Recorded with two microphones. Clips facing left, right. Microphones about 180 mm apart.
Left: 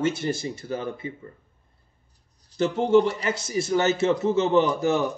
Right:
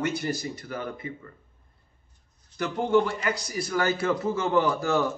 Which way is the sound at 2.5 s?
25° left (ahead or behind).